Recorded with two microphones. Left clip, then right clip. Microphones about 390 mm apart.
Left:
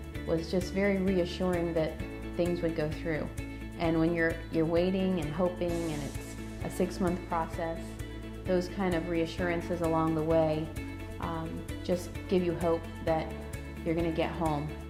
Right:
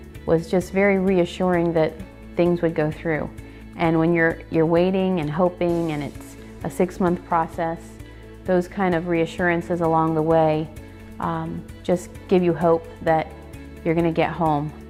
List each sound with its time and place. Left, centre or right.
0.3 s speech: right
6.7 s speech: right